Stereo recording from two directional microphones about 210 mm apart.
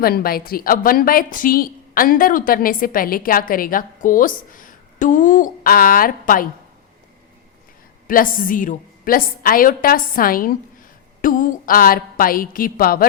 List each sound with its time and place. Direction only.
0.0 s a woman's voice: 45° left (ahead or behind)
8.0 s a woman's voice: 40° left (ahead or behind)